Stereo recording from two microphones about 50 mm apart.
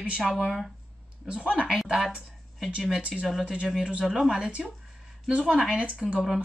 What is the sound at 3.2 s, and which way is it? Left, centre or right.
Speech, centre.